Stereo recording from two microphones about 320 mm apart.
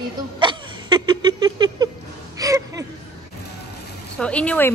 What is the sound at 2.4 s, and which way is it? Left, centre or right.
Gasp, centre.